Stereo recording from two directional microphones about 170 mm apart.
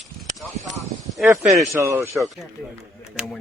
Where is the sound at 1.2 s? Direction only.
10° right (ahead or behind).